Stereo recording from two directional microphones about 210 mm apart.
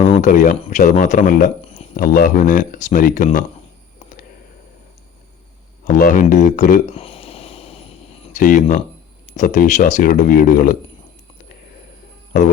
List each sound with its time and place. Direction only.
0.1 s speech: 35° left (ahead or behind)
5.8 s speech: 40° left (ahead or behind)
6.9 s a sound: 25° left (ahead or behind)
8.3 s speech: 40° left (ahead or behind)